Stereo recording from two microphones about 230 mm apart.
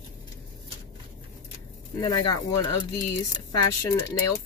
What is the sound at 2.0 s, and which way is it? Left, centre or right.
Speech, centre.